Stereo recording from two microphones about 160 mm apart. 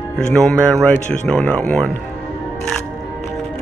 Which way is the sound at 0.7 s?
5° left (ahead or behind).